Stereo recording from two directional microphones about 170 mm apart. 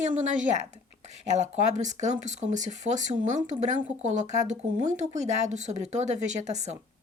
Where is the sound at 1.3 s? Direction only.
45° right (ahead or behind).